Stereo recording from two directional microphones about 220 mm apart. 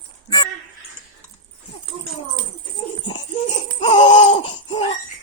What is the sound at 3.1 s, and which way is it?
Laughter, 25° left (ahead or behind).